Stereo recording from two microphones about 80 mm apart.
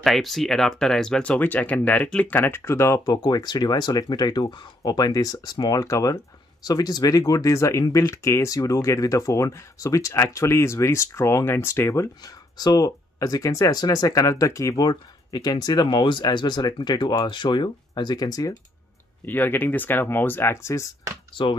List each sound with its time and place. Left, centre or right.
0.0 s speech: centre
1.4 s speech: left
3.0 s speech: left
12.2 s speech: left
16.0 s speech: left
16.3 s speech: left
19.2 s speech: left